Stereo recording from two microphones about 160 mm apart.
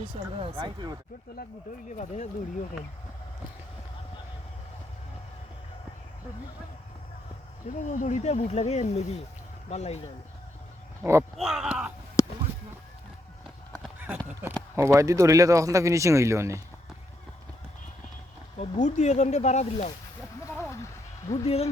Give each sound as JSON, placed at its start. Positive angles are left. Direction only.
{"t": 0.3, "sound": "speech", "side_deg": -35}
{"t": 1.9, "sound": "speech", "side_deg": 45}
{"t": 7.8, "sound": "speech", "side_deg": 50}
{"t": 11.0, "sound": "speech", "side_deg": -15}
{"t": 11.3, "sound": "speech", "side_deg": 0}
{"t": 12.2, "sound": "a sound", "side_deg": 20}
{"t": 14.8, "sound": "speech", "side_deg": -20}
{"t": 18.5, "sound": "speech", "side_deg": 45}
{"t": 21.2, "sound": "speech", "side_deg": 40}